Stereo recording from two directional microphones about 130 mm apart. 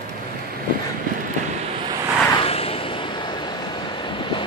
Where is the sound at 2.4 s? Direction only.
50° left (ahead or behind).